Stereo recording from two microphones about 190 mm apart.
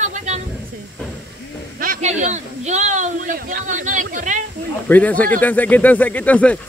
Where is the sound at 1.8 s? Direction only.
45° right (ahead or behind).